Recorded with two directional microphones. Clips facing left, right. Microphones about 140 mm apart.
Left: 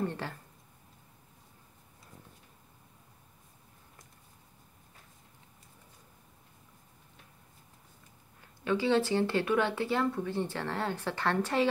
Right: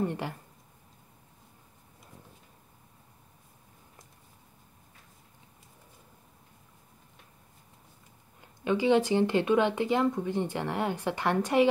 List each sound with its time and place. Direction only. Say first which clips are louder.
0.0 s speech: right 3 dB; 15° right (ahead or behind)
8.4 s speech: right 2 dB; 15° right (ahead or behind)